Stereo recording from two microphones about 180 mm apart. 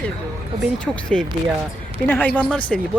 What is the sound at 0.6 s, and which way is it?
Speech, 5° left (ahead or behind).